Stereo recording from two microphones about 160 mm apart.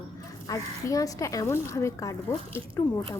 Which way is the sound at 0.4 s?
20° left (ahead or behind).